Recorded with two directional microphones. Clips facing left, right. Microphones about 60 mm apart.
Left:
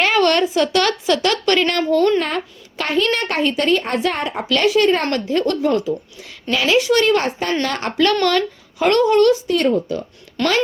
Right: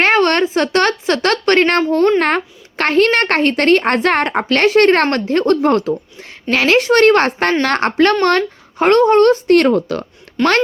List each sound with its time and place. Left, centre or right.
0.0 s a woman's voice: right
2.2 s a child's voice: right
4.4 s a child's voice: right
7.6 s speech: right
9.5 s speech: right
10.4 s a woman's voice: centre